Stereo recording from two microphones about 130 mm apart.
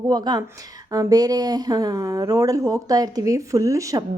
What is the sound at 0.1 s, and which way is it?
A woman's voice, 30° right (ahead or behind).